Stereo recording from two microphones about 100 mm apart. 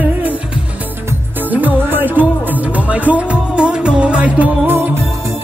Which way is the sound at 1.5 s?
15° right (ahead or behind).